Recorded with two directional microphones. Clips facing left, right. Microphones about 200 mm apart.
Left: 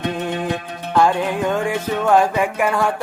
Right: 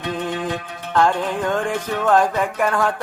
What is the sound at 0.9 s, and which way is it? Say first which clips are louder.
Speech: left 2 dB; 10° left (ahead or behind).